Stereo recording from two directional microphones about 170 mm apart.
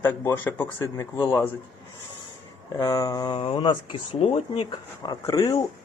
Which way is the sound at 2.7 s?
20° left (ahead or behind).